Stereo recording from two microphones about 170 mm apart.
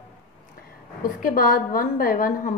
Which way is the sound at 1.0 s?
55° left (ahead or behind).